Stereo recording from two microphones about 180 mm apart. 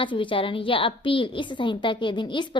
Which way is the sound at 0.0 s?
30° left (ahead or behind).